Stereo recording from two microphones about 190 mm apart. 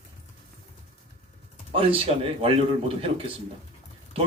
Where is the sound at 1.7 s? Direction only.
30° right (ahead or behind).